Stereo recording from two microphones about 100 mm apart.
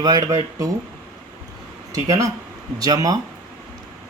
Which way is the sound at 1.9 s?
35° right (ahead or behind).